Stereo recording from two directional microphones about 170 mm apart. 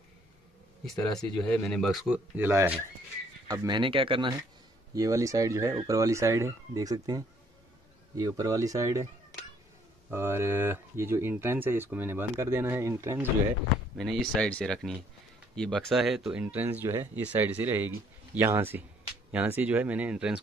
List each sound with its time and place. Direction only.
1.1 s speech: 5° left (ahead or behind); by 9.0 s 20° right (ahead or behind)
10.1 s speech: 15° right (ahead or behind)
13.9 s speech: centre (ahead or behind)